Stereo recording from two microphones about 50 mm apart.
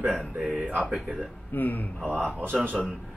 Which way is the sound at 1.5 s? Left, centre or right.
Left.